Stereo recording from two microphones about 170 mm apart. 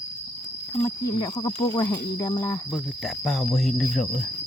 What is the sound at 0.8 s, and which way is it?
Speech, 20° left (ahead or behind).